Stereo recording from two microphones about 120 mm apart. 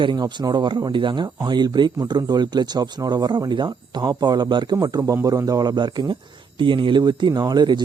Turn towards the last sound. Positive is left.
turn(degrees=-35)  # may be behind; listen again after turning